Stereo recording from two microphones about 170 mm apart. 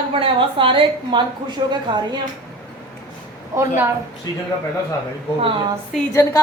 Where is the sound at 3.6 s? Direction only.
15° right (ahead or behind).